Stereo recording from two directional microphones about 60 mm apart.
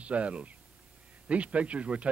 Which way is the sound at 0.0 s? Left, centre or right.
Right.